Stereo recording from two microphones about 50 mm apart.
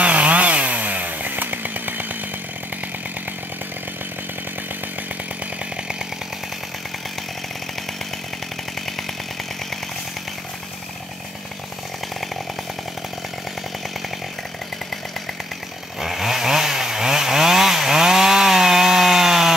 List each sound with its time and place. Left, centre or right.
0.0 s chainsaw: right
16.0 s chainsaw: centre